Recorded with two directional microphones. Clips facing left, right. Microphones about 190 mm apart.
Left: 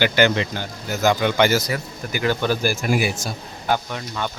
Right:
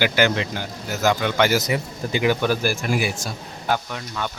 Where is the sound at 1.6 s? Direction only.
20° right (ahead or behind).